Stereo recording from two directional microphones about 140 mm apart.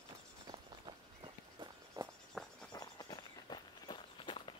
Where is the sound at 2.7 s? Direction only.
30° left (ahead or behind).